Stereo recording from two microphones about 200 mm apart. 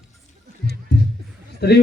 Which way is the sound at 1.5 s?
55° left (ahead or behind).